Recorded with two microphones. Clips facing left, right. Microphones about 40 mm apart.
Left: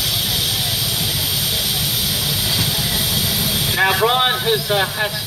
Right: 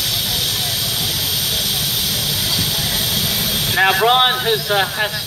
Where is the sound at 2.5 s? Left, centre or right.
Centre.